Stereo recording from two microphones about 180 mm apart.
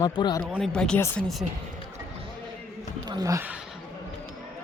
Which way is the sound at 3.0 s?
20° right (ahead or behind).